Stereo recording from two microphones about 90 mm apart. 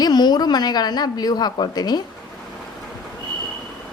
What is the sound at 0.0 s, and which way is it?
A woman's voice, 50° left (ahead or behind).